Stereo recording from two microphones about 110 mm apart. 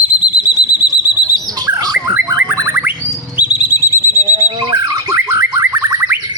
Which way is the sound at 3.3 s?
15° right (ahead or behind).